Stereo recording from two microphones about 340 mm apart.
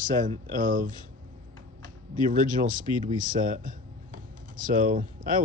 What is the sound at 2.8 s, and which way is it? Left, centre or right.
Speech, centre.